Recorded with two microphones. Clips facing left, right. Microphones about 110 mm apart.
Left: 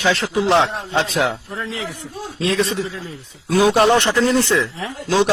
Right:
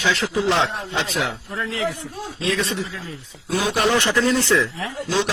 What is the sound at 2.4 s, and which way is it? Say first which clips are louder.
A man's voice: left 4 dB; 35° left (ahead or behind).